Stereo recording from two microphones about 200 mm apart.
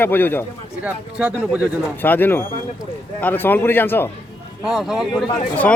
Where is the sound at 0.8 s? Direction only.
5° right (ahead or behind).